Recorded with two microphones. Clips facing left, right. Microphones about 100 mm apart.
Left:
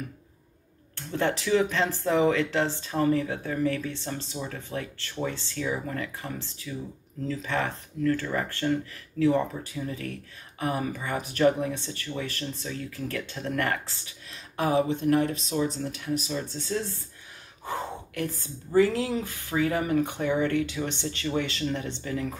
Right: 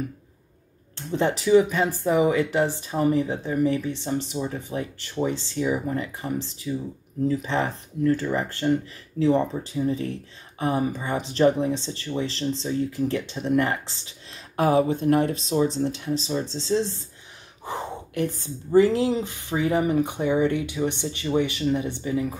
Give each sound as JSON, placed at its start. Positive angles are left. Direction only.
{"t": 0.9, "sound": "speech", "side_deg": -20}
{"t": 14.6, "sound": "speech", "side_deg": -40}